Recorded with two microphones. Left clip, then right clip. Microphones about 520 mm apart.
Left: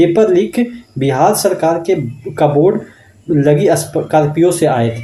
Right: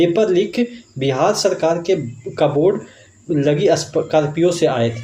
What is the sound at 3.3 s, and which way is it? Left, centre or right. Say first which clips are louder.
Speech: left 4 dB; left.